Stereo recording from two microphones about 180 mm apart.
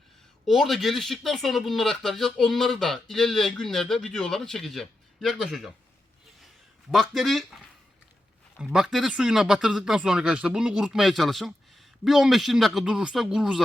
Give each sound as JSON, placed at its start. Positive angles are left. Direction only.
{"t": 0.4, "sound": "speech", "side_deg": 0}
{"t": 6.9, "sound": "speech", "side_deg": 0}